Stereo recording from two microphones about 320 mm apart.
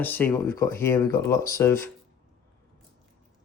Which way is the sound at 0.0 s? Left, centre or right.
Centre.